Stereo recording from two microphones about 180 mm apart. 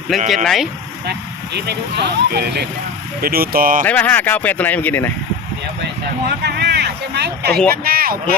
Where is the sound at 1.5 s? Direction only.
70° right (ahead or behind); by 3.8 s 50° right (ahead or behind).